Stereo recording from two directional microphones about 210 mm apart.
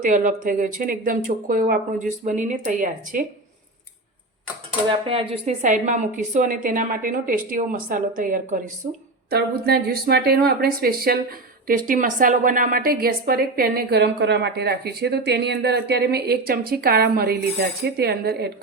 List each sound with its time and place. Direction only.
0.0 s a woman's voice: 35° right (ahead or behind)
4.9 s a woman's voice: 25° right (ahead or behind); by 18.5 s 50° right (ahead or behind)